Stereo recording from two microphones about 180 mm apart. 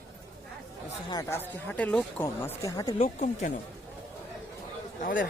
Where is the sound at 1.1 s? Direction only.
15° left (ahead or behind).